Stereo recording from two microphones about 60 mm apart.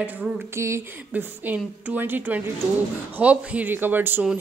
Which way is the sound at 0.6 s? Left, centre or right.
Right.